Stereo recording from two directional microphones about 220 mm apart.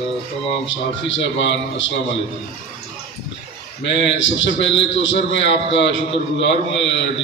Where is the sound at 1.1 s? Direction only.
55° left (ahead or behind).